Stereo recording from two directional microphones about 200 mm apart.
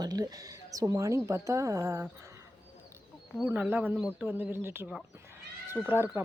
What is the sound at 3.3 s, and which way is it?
Speech, 5° right (ahead or behind).